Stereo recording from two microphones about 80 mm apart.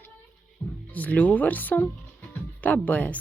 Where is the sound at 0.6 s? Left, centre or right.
Left.